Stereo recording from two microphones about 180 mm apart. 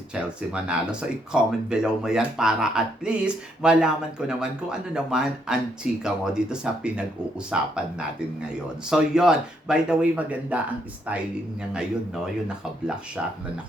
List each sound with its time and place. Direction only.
0.1 s speech: 5° right (ahead or behind)